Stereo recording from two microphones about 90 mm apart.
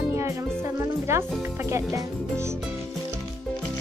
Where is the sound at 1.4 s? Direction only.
30° right (ahead or behind).